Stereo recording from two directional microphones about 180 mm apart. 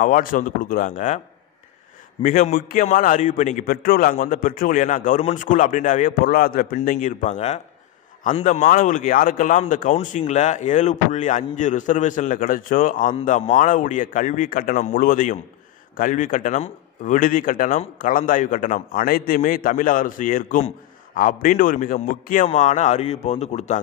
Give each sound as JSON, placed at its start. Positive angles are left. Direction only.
{"t": 0.0, "sound": "a man's voice", "side_deg": 50}
{"t": 2.2, "sound": "a man's voice", "side_deg": 50}